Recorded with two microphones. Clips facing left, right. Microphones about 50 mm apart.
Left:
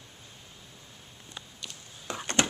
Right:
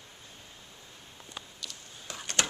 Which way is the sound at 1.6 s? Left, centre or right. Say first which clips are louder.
Even; left.